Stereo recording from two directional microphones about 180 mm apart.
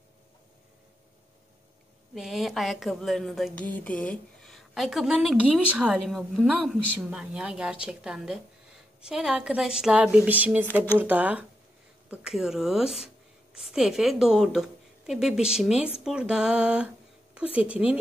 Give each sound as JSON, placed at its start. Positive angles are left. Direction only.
{"t": 2.1, "sound": "a woman's voice", "side_deg": 0}